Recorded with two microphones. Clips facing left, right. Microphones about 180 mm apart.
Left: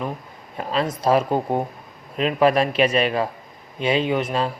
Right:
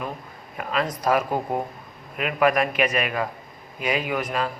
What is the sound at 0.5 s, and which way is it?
Speech, 30° left (ahead or behind).